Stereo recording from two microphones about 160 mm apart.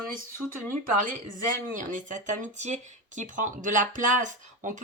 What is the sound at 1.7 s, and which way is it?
Speech, 55° right (ahead or behind).